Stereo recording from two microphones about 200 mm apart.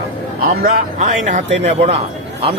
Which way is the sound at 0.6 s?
35° right (ahead or behind).